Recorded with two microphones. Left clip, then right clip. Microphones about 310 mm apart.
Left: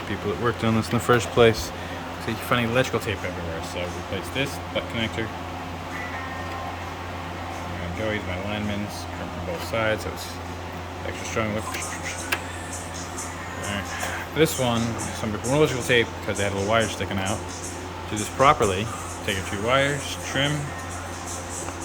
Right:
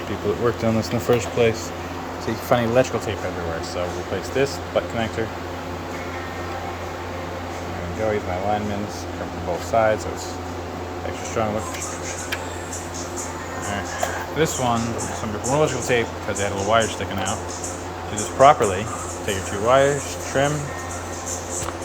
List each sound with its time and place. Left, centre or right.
0.4 s speech: centre
4.4 s speech: centre
9.7 s speech: centre
14.3 s speech: centre
18.3 s speech: centre